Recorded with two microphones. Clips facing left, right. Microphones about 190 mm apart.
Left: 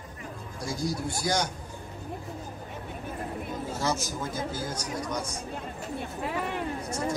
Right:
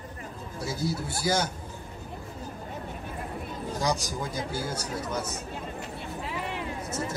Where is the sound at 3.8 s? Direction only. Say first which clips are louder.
Right 2 dB; 15° right (ahead or behind).